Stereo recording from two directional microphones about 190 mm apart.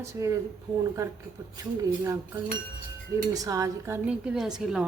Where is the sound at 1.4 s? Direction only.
20° right (ahead or behind).